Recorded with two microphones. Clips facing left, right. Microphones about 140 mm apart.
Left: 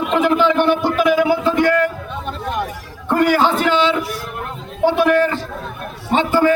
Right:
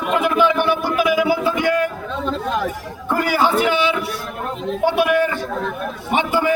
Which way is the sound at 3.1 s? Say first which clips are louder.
Left 3 dB; 10° right (ahead or behind).